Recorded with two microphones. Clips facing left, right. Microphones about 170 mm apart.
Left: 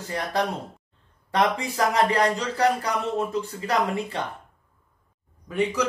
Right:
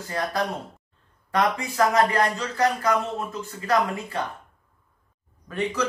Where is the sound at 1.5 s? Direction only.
35° left (ahead or behind).